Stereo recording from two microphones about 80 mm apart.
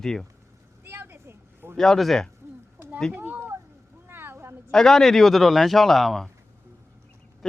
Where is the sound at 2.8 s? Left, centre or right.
Centre.